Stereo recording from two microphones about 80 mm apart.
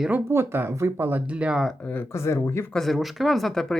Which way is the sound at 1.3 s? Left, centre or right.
Centre.